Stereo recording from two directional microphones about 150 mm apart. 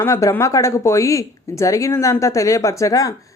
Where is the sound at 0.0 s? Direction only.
20° left (ahead or behind).